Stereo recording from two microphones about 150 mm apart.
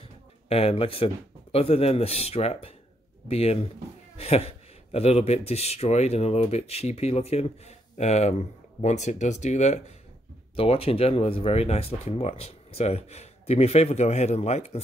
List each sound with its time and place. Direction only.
0.0 s speech: 40° left (ahead or behind)
10.5 s speech: 40° left (ahead or behind)